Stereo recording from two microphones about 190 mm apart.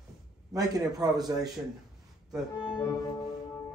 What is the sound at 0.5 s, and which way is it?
Speech, 20° right (ahead or behind).